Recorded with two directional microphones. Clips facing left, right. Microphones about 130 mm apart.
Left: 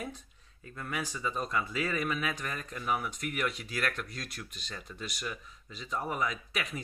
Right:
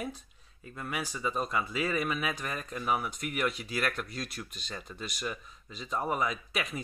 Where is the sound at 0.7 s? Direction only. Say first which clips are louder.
Right 1 dB; 15° right (ahead or behind).